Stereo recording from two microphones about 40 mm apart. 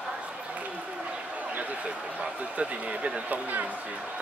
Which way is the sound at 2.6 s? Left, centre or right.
Right.